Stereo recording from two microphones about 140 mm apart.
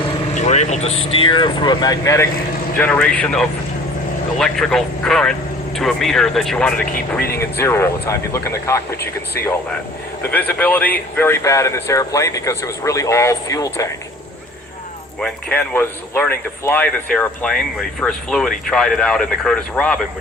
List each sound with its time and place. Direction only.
0.3 s speech: 55° left (ahead or behind); by 2.2 s 25° left (ahead or behind)
2.7 s speech: 10° left (ahead or behind)
7.3 s speech: 20° left (ahead or behind)
10.2 s speech: 10° left (ahead or behind)
15.2 s speech: 10° left (ahead or behind)